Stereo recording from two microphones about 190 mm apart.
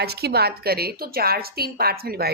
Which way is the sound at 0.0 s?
55° right (ahead or behind).